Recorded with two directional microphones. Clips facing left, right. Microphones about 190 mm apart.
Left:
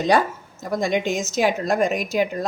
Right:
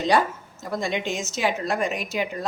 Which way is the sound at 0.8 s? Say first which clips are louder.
Left 5 dB; 45° left (ahead or behind).